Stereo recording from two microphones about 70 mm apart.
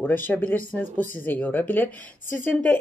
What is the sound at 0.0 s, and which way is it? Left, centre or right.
Speech, left.